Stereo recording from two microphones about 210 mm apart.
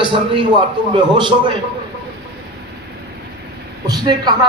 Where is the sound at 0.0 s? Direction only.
25° right (ahead or behind).